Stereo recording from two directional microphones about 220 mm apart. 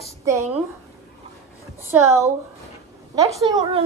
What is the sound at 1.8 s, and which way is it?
A woman's voice, 10° right (ahead or behind).